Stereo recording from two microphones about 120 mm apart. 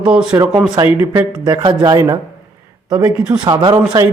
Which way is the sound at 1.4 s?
40° right (ahead or behind).